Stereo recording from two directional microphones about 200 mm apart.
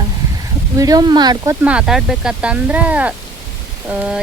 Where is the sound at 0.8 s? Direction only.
20° right (ahead or behind).